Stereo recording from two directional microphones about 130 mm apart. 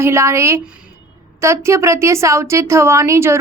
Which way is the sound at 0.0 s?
20° right (ahead or behind).